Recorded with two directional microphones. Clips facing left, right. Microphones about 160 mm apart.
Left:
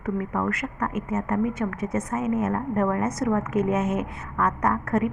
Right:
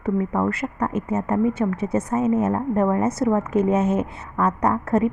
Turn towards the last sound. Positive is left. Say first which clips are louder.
# right 3 dB
turn(degrees=-30)  # may be behind; listen again after turning